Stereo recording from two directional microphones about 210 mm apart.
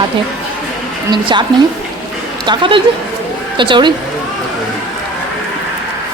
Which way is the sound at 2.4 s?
25° right (ahead or behind).